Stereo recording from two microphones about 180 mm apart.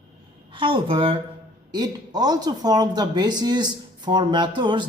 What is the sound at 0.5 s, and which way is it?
A woman's voice, 30° right (ahead or behind).